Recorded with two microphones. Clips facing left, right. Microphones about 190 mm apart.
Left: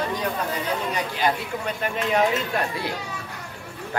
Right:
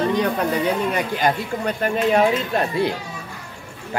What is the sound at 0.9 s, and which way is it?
Speech, 45° right (ahead or behind).